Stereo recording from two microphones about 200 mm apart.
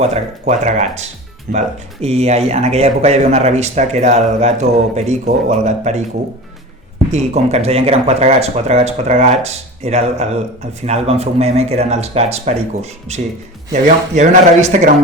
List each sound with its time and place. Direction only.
0.0 s speech: 35° right (ahead or behind)
7.1 s speech: 35° right (ahead or behind)